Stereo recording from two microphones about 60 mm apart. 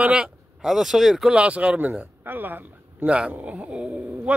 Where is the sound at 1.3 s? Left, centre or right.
Centre.